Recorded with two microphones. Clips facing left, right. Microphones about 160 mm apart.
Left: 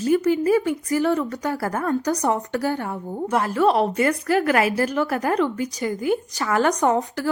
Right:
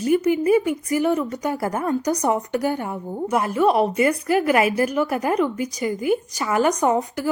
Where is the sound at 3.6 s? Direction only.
5° right (ahead or behind).